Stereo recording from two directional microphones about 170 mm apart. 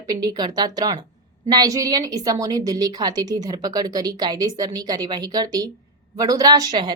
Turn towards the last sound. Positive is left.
turn(degrees=-25)  # may be behind; listen again after turning